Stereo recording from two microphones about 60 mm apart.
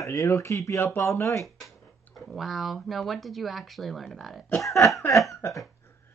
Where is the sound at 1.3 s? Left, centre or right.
Centre.